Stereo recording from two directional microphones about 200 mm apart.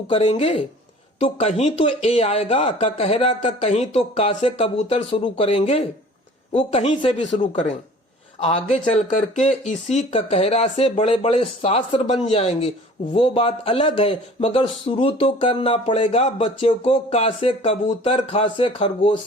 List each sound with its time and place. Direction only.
0.1 s a man's voice: 30° left (ahead or behind)
8.4 s a man's voice: 35° left (ahead or behind)